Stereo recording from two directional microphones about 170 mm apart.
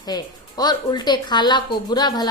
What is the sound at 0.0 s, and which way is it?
Speech, 25° left (ahead or behind).